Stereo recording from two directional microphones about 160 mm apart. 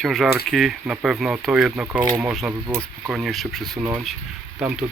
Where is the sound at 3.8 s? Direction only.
20° right (ahead or behind).